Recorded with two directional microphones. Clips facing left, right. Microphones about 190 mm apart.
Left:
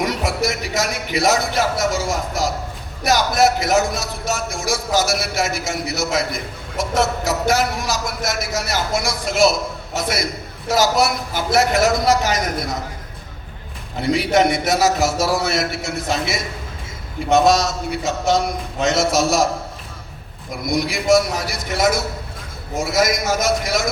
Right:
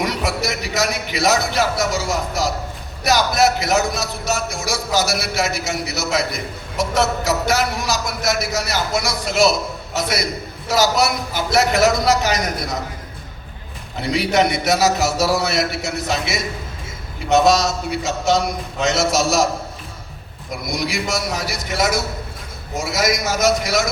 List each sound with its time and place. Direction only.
0.0 s a man's voice: 50° left (ahead or behind)
14.0 s a man's voice: 50° left (ahead or behind)
17.4 s a man's voice: 50° left (ahead or behind)
20.7 s a man's voice: 50° left (ahead or behind)